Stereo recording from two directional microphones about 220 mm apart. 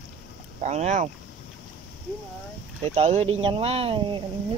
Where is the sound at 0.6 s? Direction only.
30° right (ahead or behind).